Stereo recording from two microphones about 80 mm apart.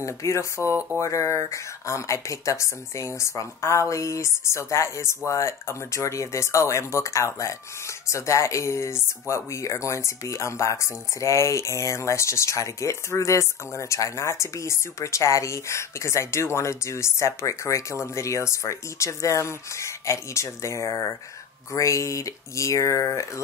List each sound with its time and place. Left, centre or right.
0.0 s speech: left
0.6 s speech: right
0.9 s speech: left